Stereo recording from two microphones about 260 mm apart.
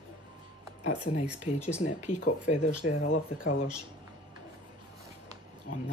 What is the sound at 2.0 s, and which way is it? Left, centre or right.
Speech, left.